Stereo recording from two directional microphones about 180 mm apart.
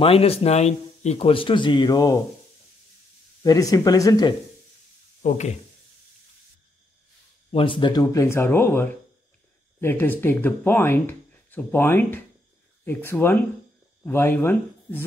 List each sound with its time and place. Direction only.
0.0 s speech: 35° left (ahead or behind)
3.4 s speech: 20° left (ahead or behind)
5.2 s speech: 40° left (ahead or behind)
7.5 s speech: 30° left (ahead or behind); by 15.0 s 10° left (ahead or behind)